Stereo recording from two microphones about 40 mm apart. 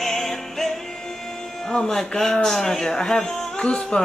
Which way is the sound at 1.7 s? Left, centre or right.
Centre.